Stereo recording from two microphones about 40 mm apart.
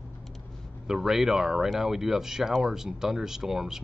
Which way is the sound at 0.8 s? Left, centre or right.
Centre.